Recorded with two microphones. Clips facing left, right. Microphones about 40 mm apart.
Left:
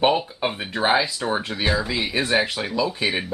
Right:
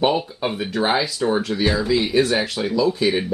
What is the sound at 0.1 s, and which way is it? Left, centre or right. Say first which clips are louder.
Speech: right 1 dB; centre.